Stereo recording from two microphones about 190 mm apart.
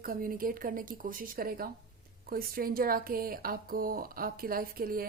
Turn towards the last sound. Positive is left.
turn(degrees=-50)  # may be behind; listen again after turning